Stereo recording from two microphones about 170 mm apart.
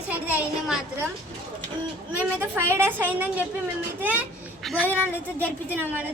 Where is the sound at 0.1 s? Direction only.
10° right (ahead or behind).